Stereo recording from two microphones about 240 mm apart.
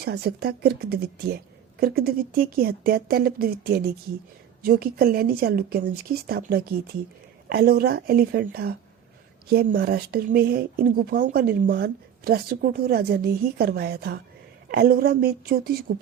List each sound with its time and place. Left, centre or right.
0.0 s speech: right